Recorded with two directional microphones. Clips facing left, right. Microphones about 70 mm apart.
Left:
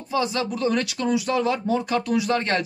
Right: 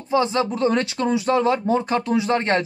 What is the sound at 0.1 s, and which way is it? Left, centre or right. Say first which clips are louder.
Speech: right 4 dB; right.